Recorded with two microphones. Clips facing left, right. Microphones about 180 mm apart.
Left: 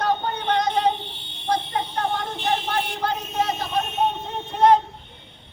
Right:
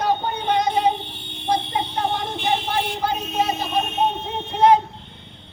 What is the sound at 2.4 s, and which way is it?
A man's voice, 10° right (ahead or behind).